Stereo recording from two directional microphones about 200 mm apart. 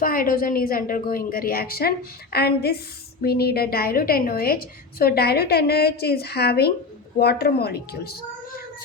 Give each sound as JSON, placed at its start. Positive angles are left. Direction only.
{"t": 0.0, "sound": "a woman's voice", "side_deg": 45}